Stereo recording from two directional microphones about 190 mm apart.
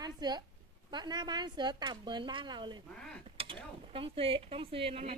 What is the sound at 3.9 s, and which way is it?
Speech, 30° right (ahead or behind).